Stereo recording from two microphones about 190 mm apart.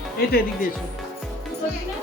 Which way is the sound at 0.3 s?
55° left (ahead or behind).